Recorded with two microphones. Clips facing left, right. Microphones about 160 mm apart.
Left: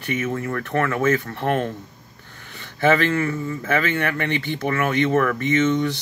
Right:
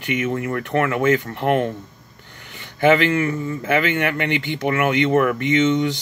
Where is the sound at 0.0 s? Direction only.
15° right (ahead or behind).